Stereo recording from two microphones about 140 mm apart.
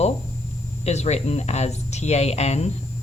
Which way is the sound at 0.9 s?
50° left (ahead or behind).